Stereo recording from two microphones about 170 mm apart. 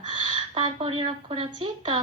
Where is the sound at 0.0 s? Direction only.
30° right (ahead or behind).